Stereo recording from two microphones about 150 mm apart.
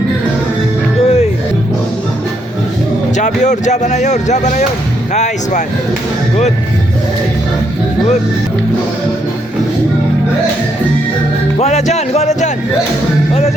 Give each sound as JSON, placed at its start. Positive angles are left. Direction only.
{"t": 1.0, "sound": "music", "side_deg": 40}
{"t": 3.2, "sound": "speech", "side_deg": 55}
{"t": 11.6, "sound": "music", "side_deg": 50}